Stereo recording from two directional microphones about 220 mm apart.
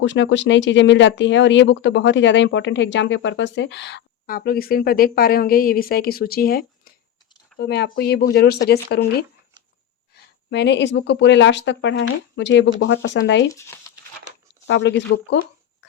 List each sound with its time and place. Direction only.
0.0 s speech: 55° left (ahead or behind)
10.5 s speech: 50° left (ahead or behind)
13.5 s a sound: 15° left (ahead or behind)
14.7 s speech: 55° left (ahead or behind)